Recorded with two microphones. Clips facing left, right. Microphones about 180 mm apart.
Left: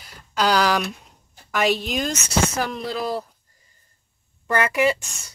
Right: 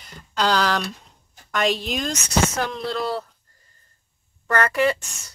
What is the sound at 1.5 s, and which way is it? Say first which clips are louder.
Speech: left 1 dB; 5° left (ahead or behind).